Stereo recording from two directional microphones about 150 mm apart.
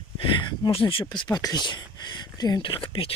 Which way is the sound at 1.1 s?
25° left (ahead or behind).